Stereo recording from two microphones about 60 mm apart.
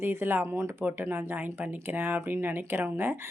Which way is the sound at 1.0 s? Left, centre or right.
Right.